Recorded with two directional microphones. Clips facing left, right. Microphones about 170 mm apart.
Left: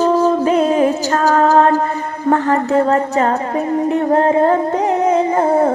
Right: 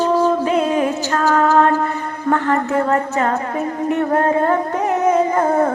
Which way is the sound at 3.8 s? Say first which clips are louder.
Left 2 dB; 25° left (ahead or behind).